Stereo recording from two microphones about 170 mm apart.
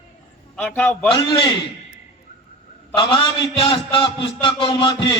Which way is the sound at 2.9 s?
30° left (ahead or behind).